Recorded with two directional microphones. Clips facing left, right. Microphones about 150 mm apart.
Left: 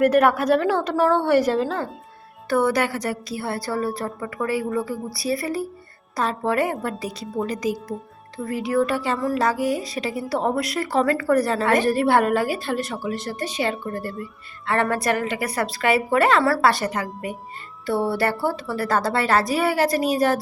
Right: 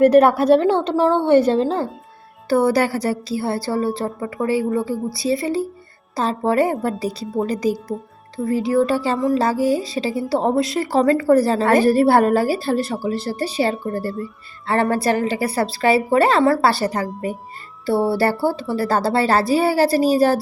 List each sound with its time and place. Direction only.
0.0 s a woman's voice: 30° right (ahead or behind)
4.6 s speech: centre (ahead or behind)
5.1 s a woman's voice: 25° right (ahead or behind)